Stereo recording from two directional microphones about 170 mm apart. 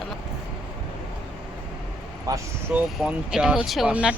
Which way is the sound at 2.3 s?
20° right (ahead or behind).